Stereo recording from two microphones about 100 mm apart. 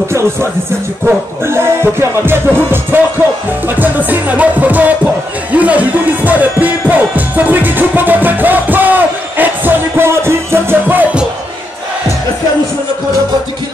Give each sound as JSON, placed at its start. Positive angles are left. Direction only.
{"t": 0.1, "sound": "speech", "side_deg": -25}
{"t": 3.6, "sound": "music", "side_deg": -15}